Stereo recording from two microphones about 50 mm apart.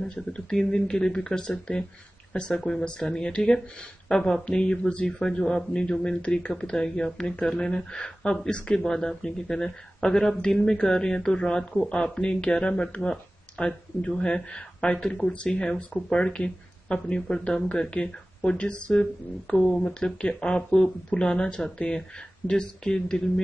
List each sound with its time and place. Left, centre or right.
0.1 s speech: centre